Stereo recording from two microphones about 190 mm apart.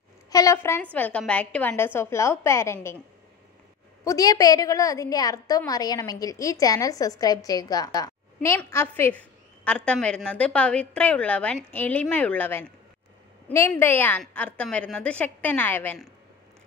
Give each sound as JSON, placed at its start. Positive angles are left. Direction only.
{"t": 0.3, "sound": "a woman's voice", "side_deg": 15}
{"t": 4.0, "sound": "a woman's voice", "side_deg": 20}